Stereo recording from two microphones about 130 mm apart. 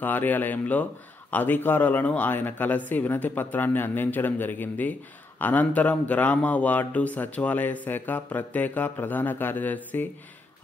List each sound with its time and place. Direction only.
0.0 s a man's voice: 15° left (ahead or behind)